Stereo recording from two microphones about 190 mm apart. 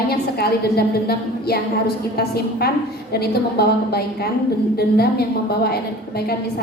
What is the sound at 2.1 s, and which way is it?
A woman's voice, 55° left (ahead or behind).